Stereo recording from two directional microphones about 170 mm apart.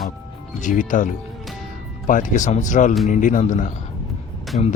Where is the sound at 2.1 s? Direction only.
50° left (ahead or behind).